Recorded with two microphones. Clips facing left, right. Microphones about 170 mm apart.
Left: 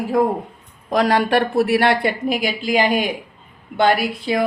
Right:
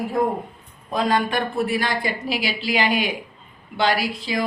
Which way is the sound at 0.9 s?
75° left (ahead or behind).